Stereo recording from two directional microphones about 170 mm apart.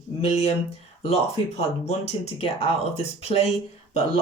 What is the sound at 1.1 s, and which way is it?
Speech, 40° left (ahead or behind).